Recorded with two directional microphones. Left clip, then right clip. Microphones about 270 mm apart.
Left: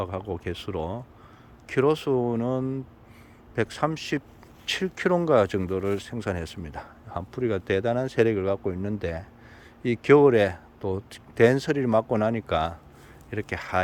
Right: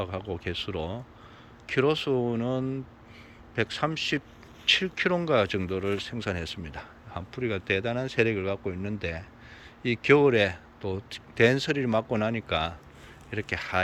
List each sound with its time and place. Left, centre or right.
0.0 s a man's voice: centre